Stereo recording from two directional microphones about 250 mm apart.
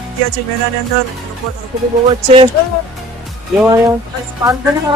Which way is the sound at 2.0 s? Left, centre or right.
Centre.